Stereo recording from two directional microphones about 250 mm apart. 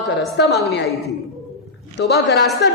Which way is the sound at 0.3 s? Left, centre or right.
Left.